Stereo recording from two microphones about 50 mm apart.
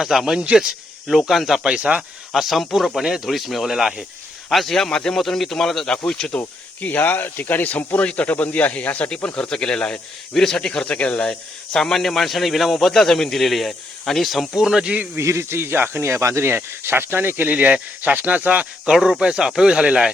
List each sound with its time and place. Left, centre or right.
0.0 s speech: centre
1.6 s speech: centre
2.3 s speech: centre
4.4 s speech: centre
5.1 s speech: centre
6.8 s speech: left
9.0 s speech: left
11.3 s speech: centre
14.5 s speech: centre
15.2 s speech: right
16.5 s speech: right
17.5 s speech: right
18.9 s speech: centre